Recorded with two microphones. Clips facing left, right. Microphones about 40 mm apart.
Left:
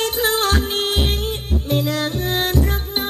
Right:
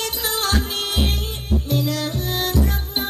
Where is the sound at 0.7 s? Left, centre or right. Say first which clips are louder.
Left 3 dB; left.